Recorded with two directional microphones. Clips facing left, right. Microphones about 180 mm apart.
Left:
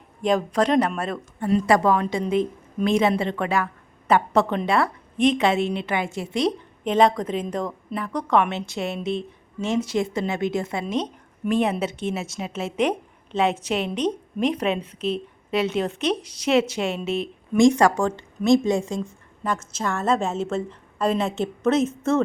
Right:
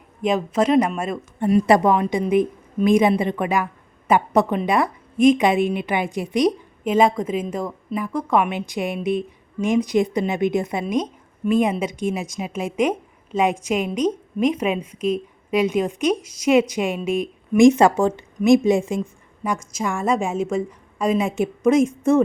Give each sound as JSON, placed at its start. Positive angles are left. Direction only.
{"t": 0.3, "sound": "a woman's voice", "side_deg": -5}